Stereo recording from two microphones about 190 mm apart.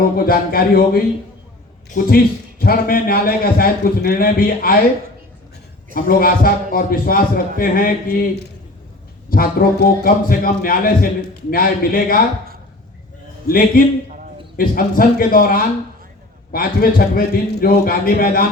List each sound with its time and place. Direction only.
0.3 s a man's voice: 50° left (ahead or behind)
5.9 s a man's voice: 50° left (ahead or behind)
9.3 s a man's voice: 50° left (ahead or behind)
13.5 s a man's voice: 50° left (ahead or behind)